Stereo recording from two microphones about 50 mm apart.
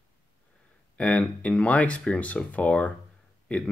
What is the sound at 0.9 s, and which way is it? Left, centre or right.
Speech, left.